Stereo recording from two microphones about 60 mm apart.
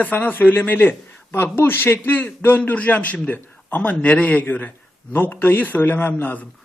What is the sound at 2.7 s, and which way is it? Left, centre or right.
A man's voice, left.